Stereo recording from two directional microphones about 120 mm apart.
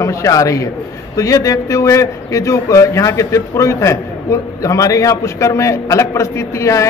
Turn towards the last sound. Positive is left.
turn(degrees=25)  # may be behind; listen again after turning